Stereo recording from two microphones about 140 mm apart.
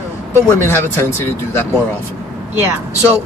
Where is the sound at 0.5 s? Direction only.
15° left (ahead or behind).